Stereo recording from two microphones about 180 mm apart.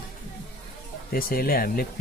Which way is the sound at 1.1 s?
55° left (ahead or behind).